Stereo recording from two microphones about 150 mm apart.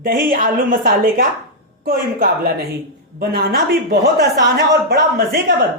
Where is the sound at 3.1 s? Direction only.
90° right.